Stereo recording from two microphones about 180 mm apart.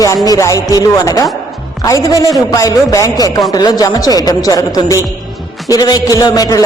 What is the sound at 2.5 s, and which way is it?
A man's voice, 20° left (ahead or behind).